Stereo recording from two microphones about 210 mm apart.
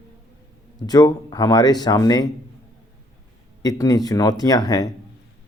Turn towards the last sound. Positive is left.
turn(degrees=15)  # may be behind; listen again after turning